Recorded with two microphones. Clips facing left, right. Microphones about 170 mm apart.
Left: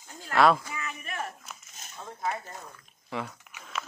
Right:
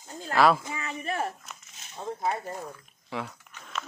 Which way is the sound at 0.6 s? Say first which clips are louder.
Right 5 dB; 30° right (ahead or behind).